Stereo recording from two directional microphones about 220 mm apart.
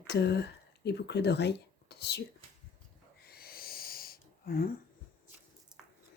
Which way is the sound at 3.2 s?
45° left (ahead or behind).